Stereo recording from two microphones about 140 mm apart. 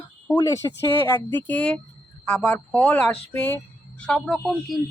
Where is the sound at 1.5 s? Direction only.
10° left (ahead or behind).